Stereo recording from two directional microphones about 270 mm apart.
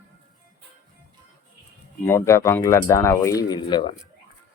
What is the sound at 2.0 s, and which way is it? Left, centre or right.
Speech, centre.